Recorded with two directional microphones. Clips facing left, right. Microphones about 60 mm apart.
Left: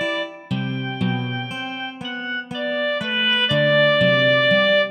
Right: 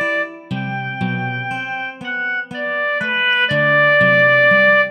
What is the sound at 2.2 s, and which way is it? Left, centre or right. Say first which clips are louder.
Music: right 3 dB; right.